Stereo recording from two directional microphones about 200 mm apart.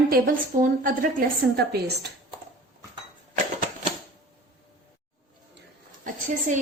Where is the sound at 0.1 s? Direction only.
40° right (ahead or behind).